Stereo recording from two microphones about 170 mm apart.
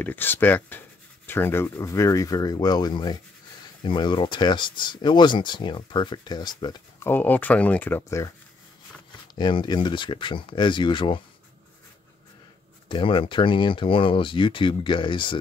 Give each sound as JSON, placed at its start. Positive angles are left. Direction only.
{"t": 0.0, "sound": "speech", "side_deg": 10}
{"t": 7.1, "sound": "speech", "side_deg": 10}
{"t": 9.3, "sound": "speech", "side_deg": 25}
{"t": 12.8, "sound": "speech", "side_deg": 30}